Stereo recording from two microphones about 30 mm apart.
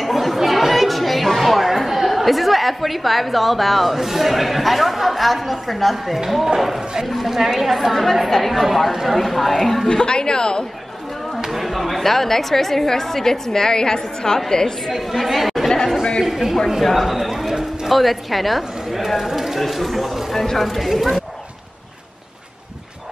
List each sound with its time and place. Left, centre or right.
0.0 s chatter: centre
1.4 s a sound: centre
2.0 s a woman's voice: centre
9.8 s speech: left
11.6 s a woman's voice: centre
15.1 s a woman's voice: centre